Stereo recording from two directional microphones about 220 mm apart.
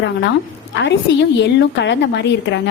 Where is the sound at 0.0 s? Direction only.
55° left (ahead or behind).